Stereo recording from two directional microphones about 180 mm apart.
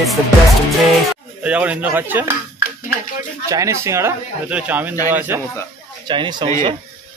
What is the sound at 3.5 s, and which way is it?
Speech, 15° right (ahead or behind).